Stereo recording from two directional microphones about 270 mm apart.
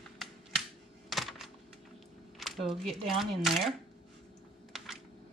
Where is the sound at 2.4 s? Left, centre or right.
Centre.